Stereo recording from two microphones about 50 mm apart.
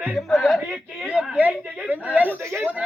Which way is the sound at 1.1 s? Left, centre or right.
Centre.